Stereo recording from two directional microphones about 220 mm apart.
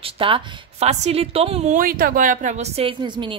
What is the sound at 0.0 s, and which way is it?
Speech, 25° right (ahead or behind).